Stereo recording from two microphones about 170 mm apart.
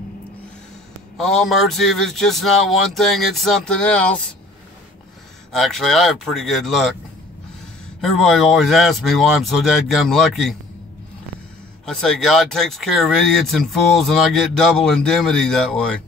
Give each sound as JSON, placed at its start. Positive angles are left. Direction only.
{"t": 1.1, "sound": "speech", "side_deg": 0}
{"t": 5.5, "sound": "speech", "side_deg": 0}
{"t": 8.0, "sound": "speech", "side_deg": 0}
{"t": 11.8, "sound": "speech", "side_deg": 5}